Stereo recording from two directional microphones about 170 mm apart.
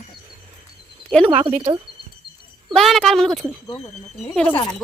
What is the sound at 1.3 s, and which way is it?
Speech, 35° right (ahead or behind).